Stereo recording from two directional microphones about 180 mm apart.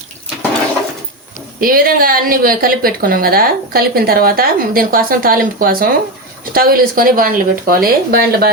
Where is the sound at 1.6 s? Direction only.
55° right (ahead or behind).